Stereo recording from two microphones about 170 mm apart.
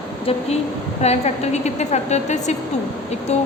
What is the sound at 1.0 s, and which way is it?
A woman's voice, 40° left (ahead or behind).